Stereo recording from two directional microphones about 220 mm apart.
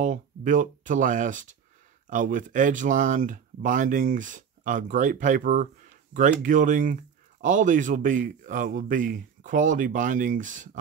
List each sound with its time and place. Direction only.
0.0 s speech: 35° right (ahead or behind)